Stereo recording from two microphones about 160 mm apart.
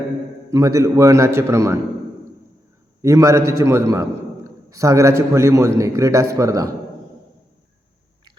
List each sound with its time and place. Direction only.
0.5 s a man's voice: 20° right (ahead or behind)
3.0 s a man's voice: 20° right (ahead or behind)